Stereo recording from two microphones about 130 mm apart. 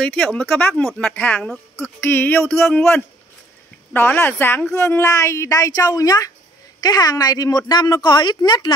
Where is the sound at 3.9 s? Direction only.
15° left (ahead or behind); by 8.7 s 35° left (ahead or behind).